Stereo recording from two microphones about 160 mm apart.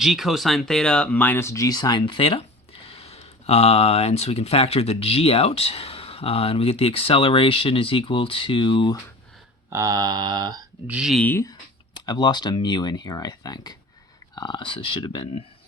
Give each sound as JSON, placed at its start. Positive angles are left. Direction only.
{"t": 0.0, "sound": "speech", "side_deg": 0}
{"t": 9.6, "sound": "a sound", "side_deg": -20}
{"t": 10.8, "sound": "speech", "side_deg": -5}
{"t": 11.2, "sound": "speech", "side_deg": 10}
{"t": 12.0, "sound": "speech", "side_deg": 25}